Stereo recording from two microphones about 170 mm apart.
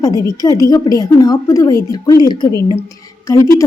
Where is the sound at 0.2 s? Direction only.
20° left (ahead or behind).